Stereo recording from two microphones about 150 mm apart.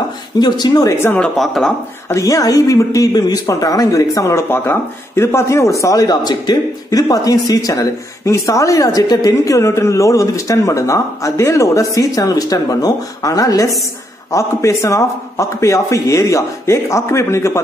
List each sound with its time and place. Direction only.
0.4 s speech: 30° left (ahead or behind); by 1.7 s centre (ahead or behind)
2.0 s speech: 20° left (ahead or behind)